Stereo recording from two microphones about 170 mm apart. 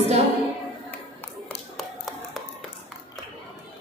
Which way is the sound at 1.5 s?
Centre (ahead or behind).